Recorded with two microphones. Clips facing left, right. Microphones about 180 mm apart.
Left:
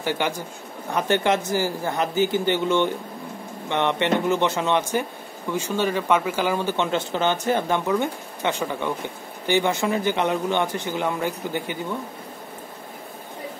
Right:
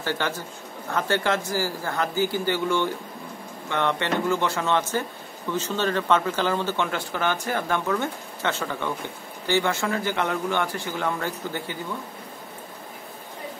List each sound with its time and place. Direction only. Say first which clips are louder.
0.0 s speech: left 3 dB; 15° left (ahead or behind)